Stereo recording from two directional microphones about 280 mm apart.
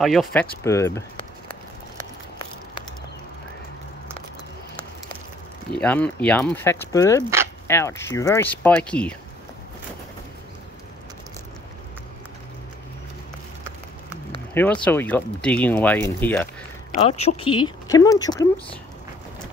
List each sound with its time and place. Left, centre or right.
0.0 s speech: centre
5.8 s speech: centre
14.5 s speech: centre
16.9 s speech: left